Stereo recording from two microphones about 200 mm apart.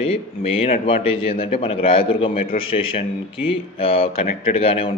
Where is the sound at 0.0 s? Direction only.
30° left (ahead or behind).